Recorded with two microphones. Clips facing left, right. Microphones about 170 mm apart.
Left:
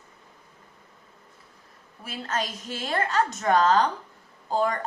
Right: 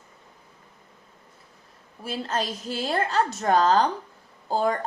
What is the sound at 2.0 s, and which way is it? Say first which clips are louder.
A woman's voice: right 3 dB; 30° right (ahead or behind).